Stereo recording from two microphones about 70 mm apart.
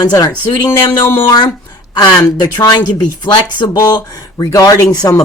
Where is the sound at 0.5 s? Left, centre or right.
Left.